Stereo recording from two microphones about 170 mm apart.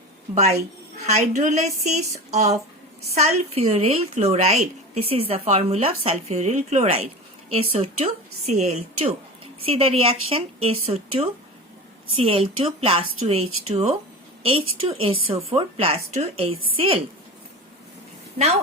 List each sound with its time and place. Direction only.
1.0 s a woman's voice: 45° right (ahead or behind)